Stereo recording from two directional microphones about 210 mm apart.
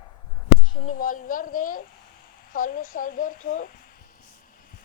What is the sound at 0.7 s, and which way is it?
Speech, 40° left (ahead or behind).